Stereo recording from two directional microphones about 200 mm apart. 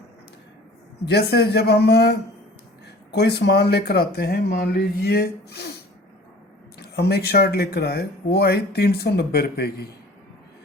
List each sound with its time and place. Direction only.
1.0 s speech: 55° left (ahead or behind)
6.7 s speech: 55° left (ahead or behind)